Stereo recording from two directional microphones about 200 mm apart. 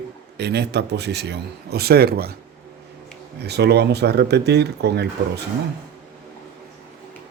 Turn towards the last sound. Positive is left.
turn(degrees=-55)  # may be behind; listen again after turning